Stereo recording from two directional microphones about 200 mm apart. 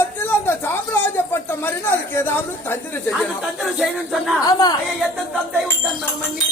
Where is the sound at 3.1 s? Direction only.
Centre (ahead or behind).